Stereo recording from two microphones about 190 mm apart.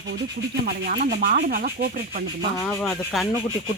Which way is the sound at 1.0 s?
55° right (ahead or behind).